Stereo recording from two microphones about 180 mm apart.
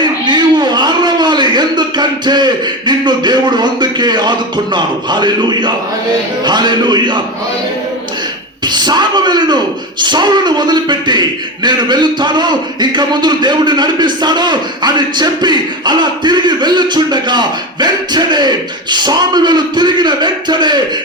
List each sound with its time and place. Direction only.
0.0 s a man's voice: 25° right (ahead or behind)
8.6 s speech: 25° right (ahead or behind)